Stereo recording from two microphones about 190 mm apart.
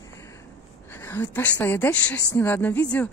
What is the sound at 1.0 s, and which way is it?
A woman's voice, 10° left (ahead or behind).